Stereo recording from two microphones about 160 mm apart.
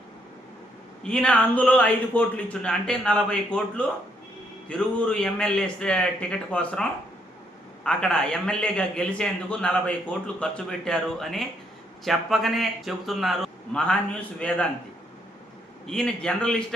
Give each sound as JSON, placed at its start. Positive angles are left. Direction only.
{"t": 1.0, "sound": "a man's voice", "side_deg": 5}
{"t": 7.9, "sound": "a man's voice", "side_deg": 5}
{"t": 15.9, "sound": "a man's voice", "side_deg": 5}